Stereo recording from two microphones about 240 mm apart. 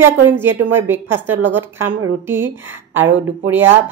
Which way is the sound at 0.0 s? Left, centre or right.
Centre.